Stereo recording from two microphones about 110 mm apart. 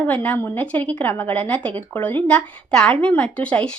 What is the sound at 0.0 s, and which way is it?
Speech, 15° left (ahead or behind).